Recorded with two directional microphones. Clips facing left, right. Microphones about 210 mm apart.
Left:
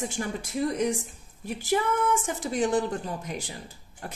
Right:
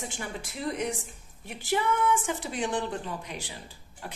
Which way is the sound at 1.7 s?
40° left (ahead or behind).